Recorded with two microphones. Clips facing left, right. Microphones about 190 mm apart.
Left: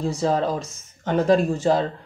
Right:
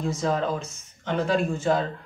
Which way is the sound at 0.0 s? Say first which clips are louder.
Left 3 dB; 30° left (ahead or behind).